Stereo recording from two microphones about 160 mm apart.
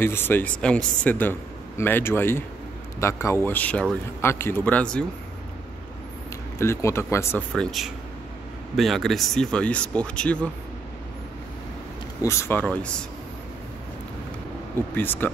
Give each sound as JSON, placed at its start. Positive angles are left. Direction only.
{"t": 0.0, "sound": "speech", "side_deg": 15}
{"t": 6.6, "sound": "speech", "side_deg": 15}
{"t": 7.5, "sound": "speech", "side_deg": 0}
{"t": 12.2, "sound": "speech", "side_deg": 15}
{"t": 14.8, "sound": "speech", "side_deg": 10}